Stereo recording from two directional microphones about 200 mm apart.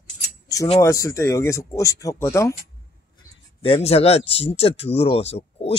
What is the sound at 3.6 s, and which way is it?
Speech, 30° left (ahead or behind).